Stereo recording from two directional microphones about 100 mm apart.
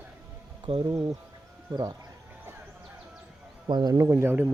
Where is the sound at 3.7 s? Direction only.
50° right (ahead or behind).